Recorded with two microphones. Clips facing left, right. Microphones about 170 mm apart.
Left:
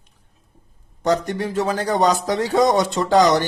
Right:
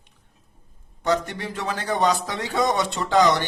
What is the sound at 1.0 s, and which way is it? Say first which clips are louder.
Speech: left 4 dB; 40° left (ahead or behind).